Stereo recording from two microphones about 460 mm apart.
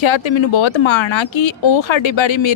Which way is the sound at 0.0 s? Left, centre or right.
Left.